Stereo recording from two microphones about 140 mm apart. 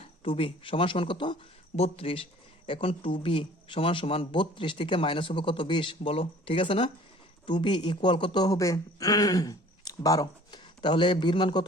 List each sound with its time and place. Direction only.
0.3 s speech: 40° left (ahead or behind)